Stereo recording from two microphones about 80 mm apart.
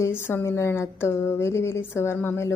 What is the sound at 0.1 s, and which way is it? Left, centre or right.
Speech, left.